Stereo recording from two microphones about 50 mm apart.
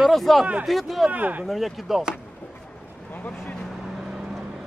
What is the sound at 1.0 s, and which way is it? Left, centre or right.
Speech, right.